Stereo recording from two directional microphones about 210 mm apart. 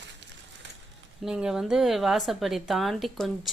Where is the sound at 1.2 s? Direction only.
5° right (ahead or behind).